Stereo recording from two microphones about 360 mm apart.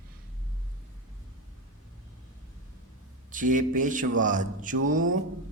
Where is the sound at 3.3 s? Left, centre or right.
Right.